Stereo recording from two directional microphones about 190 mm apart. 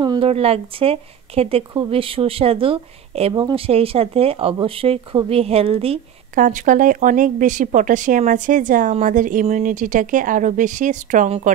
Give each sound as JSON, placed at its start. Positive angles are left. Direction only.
{"t": 0.0, "sound": "speech", "side_deg": -25}
{"t": 6.3, "sound": "speech", "side_deg": -45}